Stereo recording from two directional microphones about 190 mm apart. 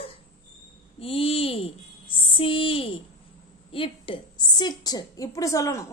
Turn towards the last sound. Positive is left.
turn(degrees=15)  # may be behind; listen again after turning